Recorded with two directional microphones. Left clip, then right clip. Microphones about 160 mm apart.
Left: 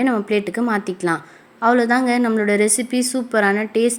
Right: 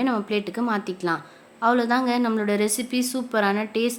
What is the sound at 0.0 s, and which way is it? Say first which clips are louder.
A woman's voice: left 5 dB; 20° left (ahead or behind).